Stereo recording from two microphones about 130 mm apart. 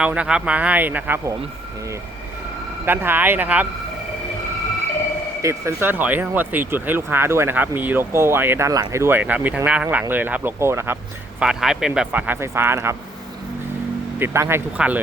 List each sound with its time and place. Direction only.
0.0 s speech: 10° right (ahead or behind)
2.8 s speech: 15° right (ahead or behind)
5.4 s speech: 20° right (ahead or behind)
11.3 s speech: 5° right (ahead or behind); by 13.0 s 20° right (ahead or behind)
14.2 s speech: 20° right (ahead or behind)